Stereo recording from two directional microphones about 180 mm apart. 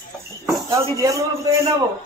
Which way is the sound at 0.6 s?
15° right (ahead or behind).